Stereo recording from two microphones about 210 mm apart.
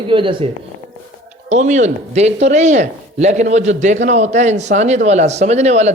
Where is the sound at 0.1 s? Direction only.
25° right (ahead or behind).